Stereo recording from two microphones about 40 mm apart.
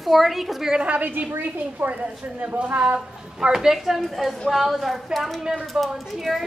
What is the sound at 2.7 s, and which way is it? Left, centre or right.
Speech, right.